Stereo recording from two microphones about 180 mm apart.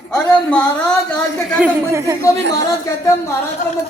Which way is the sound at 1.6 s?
15° right (ahead or behind).